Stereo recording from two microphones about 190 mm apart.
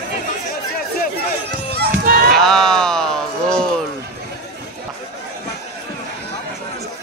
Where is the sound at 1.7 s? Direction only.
55° right (ahead or behind).